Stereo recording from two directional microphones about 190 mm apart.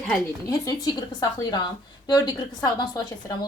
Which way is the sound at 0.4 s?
20° left (ahead or behind).